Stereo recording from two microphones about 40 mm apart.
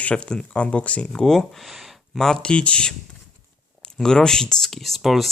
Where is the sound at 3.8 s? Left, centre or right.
Centre.